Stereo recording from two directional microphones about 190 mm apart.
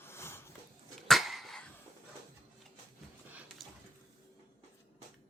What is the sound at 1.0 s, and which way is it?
Dog, centre (ahead or behind).